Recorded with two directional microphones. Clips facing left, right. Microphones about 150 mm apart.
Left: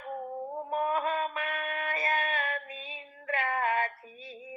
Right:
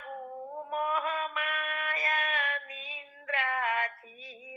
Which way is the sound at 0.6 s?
30° left (ahead or behind).